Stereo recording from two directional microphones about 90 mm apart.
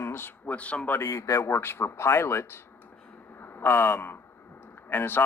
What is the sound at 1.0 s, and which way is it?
Speech, 30° left (ahead or behind).